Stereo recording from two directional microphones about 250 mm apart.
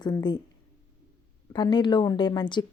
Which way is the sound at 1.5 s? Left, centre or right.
Centre.